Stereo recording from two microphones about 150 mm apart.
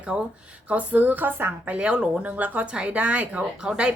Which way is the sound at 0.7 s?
10° right (ahead or behind).